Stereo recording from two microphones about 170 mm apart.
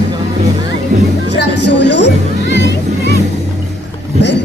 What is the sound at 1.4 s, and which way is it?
Speech, 90° left.